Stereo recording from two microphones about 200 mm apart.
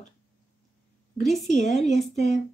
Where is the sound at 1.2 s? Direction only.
Centre (ahead or behind).